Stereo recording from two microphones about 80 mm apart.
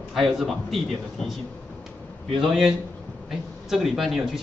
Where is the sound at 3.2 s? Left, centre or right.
Centre.